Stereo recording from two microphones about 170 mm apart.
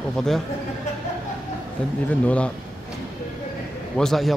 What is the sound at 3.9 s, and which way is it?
Speech, centre (ahead or behind).